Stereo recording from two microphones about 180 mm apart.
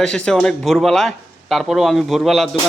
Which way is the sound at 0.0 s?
5° left (ahead or behind).